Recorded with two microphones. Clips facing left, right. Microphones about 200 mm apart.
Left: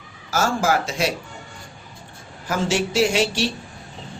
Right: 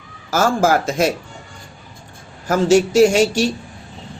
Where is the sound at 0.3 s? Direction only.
50° right (ahead or behind).